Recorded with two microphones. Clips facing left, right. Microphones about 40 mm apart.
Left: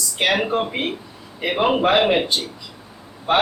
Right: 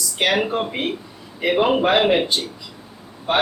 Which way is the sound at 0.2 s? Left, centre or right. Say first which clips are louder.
Even; centre.